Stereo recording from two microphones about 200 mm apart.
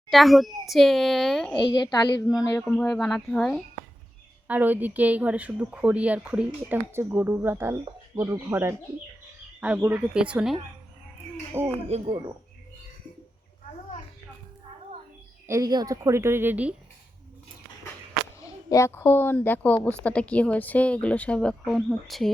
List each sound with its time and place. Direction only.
0.1 s a woman's voice: centre (ahead or behind)
1.7 s a woman's voice: 20° left (ahead or behind)
2.6 s a woman's voice: 5° left (ahead or behind)
4.4 s speech: 10° right (ahead or behind)
11.6 s speech: 10° right (ahead or behind)
11.9 s speech: 30° right (ahead or behind)
15.4 s speech: 15° right (ahead or behind)
18.4 s a woman's voice: 15° left (ahead or behind)